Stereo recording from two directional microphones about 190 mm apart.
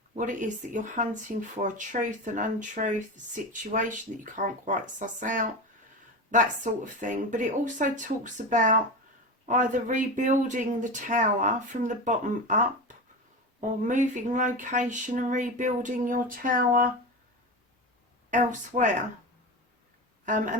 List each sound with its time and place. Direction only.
0.2 s speech: 45° right (ahead or behind)
6.7 s speech: 40° right (ahead or behind)
18.3 s speech: 40° right (ahead or behind)
20.2 s speech: 45° right (ahead or behind)